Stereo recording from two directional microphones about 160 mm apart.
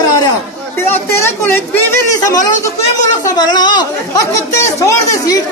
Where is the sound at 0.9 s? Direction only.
15° left (ahead or behind).